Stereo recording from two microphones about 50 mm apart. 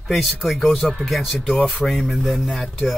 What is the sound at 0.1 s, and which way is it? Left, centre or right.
Speech, centre.